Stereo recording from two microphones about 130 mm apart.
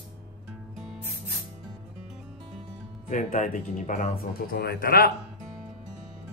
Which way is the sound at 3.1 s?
75° left (ahead or behind).